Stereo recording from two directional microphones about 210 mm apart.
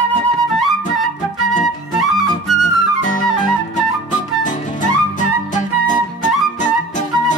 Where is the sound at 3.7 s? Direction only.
35° left (ahead or behind).